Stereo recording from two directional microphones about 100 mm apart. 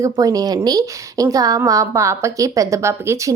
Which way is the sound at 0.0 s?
35° right (ahead or behind).